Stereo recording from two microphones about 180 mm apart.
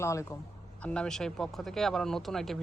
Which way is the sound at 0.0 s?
15° left (ahead or behind).